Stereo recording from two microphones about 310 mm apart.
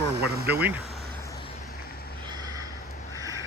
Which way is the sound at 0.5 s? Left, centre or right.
Centre.